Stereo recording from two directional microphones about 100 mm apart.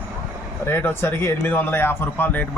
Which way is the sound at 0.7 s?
20° left (ahead or behind).